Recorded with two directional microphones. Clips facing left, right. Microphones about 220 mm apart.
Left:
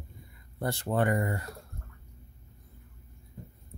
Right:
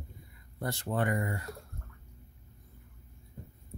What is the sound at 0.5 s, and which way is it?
Speech, 30° left (ahead or behind).